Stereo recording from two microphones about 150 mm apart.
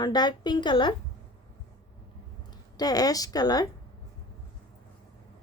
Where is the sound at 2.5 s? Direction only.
25° left (ahead or behind).